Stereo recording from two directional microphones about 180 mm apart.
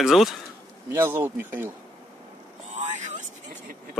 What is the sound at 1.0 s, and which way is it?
Speech, 10° right (ahead or behind).